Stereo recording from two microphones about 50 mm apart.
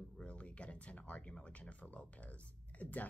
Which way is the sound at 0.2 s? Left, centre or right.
Left.